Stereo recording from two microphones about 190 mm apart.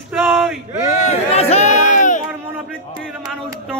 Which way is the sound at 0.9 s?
40° left (ahead or behind).